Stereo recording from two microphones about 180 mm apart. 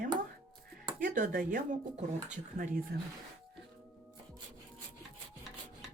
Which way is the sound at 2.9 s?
60° right (ahead or behind).